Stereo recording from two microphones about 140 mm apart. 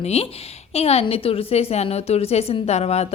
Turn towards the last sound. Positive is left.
turn(degrees=50)  # may be behind; listen again after turning